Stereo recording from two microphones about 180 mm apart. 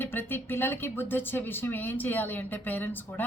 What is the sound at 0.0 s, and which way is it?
Speech, 10° left (ahead or behind).